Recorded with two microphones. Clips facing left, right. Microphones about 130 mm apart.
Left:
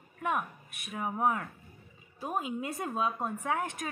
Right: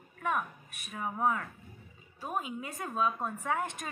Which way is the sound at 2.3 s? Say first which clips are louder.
Left 3 dB; 25° left (ahead or behind).